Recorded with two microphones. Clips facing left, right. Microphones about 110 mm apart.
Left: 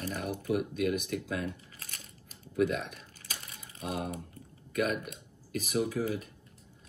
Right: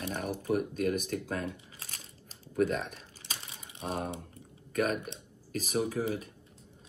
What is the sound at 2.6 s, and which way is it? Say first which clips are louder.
Speech: even; 45° right (ahead or behind).